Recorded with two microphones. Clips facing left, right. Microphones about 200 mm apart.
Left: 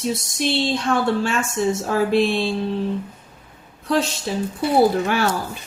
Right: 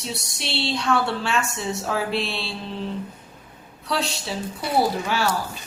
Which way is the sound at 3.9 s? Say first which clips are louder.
Left 6 dB; 50° left (ahead or behind).